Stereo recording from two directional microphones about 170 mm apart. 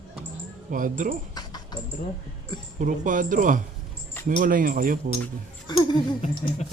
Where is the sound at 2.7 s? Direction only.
50° right (ahead or behind).